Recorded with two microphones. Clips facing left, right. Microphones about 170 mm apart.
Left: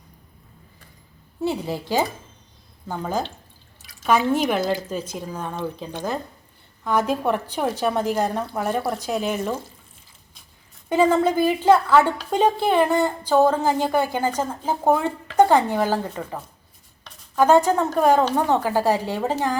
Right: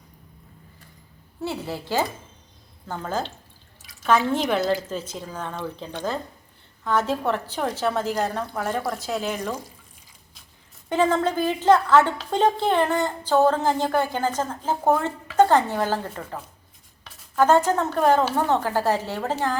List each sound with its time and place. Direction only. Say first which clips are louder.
1.4 s a woman's voice: left 4 dB; 15° left (ahead or behind)
10.8 s a woman's voice: left 3 dB; 10° left (ahead or behind)